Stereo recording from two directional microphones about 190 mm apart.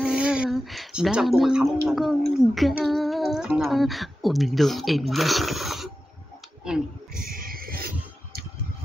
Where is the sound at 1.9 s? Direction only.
Centre (ahead or behind).